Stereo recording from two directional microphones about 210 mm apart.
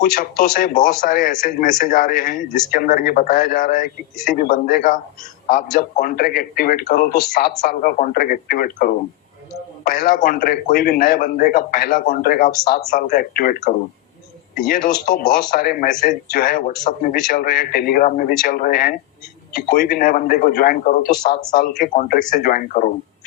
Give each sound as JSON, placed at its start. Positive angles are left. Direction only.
{"t": 0.0, "sound": "a man's voice", "side_deg": 45}